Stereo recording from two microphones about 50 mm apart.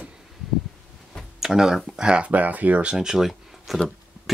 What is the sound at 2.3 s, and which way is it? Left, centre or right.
Speech, right.